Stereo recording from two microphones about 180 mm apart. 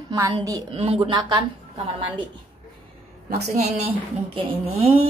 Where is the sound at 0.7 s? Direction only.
35° right (ahead or behind).